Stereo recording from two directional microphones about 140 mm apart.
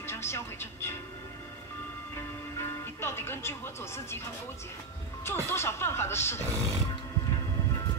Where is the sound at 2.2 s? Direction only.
20° left (ahead or behind).